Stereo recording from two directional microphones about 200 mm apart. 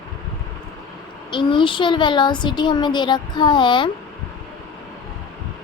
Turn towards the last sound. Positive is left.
turn(degrees=25)  # may be behind; listen again after turning